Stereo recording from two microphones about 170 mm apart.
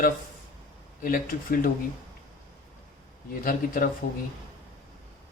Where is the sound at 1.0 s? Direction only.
55° left (ahead or behind).